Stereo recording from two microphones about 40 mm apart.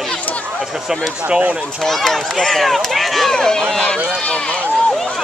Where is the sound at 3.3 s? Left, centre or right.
Centre.